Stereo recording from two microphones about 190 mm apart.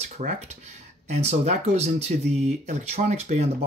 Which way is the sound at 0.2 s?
35° right (ahead or behind).